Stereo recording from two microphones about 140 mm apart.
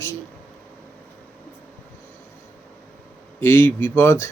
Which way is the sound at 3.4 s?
15° left (ahead or behind).